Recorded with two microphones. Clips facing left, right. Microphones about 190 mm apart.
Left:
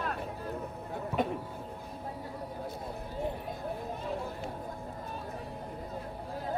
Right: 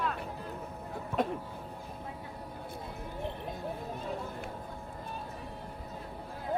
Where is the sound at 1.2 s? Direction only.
Centre (ahead or behind).